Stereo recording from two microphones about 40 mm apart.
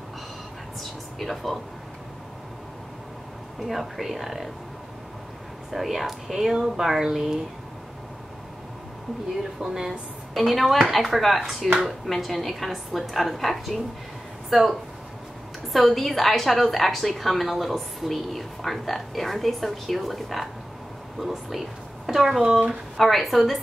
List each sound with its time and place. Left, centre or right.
1.2 s a woman's voice: centre
3.6 s a woman's voice: centre
5.7 s speech: centre
10.3 s a woman's voice: centre